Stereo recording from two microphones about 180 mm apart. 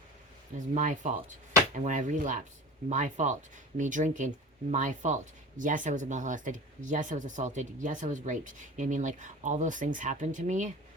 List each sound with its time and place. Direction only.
0.7 s speech: 45° right (ahead or behind)